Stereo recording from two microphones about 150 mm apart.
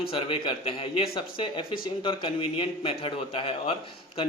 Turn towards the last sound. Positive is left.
turn(degrees=35)  # may be behind; listen again after turning